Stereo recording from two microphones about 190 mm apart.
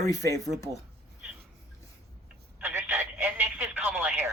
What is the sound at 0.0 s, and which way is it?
Speech, 20° left (ahead or behind).